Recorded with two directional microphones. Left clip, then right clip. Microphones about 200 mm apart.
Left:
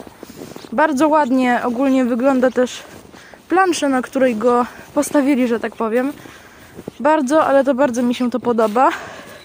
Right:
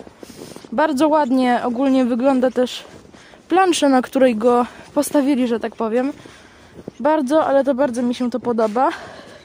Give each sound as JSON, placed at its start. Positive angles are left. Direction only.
{"t": 0.7, "sound": "speech", "side_deg": -10}
{"t": 3.4, "sound": "speech", "side_deg": -20}